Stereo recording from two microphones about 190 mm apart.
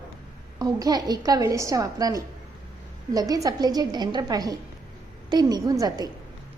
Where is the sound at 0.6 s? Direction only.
20° right (ahead or behind).